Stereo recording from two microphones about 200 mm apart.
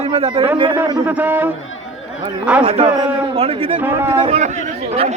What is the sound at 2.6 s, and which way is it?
A man's voice, 30° right (ahead or behind).